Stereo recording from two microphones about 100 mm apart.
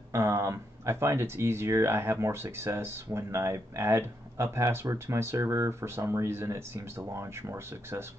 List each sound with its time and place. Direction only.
0.1 s speech: 25° right (ahead or behind)